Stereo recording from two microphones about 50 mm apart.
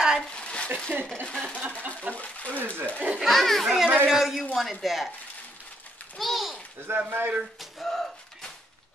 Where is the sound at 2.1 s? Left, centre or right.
Left.